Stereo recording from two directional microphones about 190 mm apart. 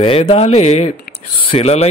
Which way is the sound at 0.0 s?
30° left (ahead or behind).